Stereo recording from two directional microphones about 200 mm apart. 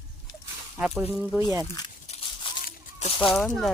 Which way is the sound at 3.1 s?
25° left (ahead or behind).